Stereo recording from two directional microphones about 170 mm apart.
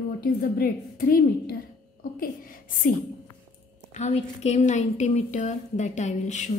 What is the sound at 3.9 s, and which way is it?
A woman's voice, 40° left (ahead or behind).